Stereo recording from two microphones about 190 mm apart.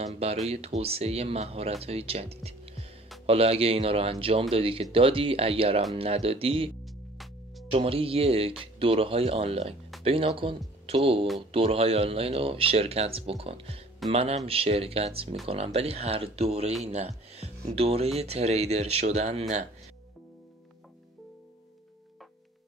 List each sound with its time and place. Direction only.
0.0 s speech: 35° right (ahead or behind)
6.8 s music: centre (ahead or behind)
7.7 s speech: 30° right (ahead or behind)